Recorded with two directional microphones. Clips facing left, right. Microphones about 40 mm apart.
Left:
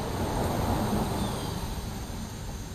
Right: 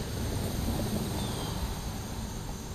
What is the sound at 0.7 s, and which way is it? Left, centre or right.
Vehicle, left.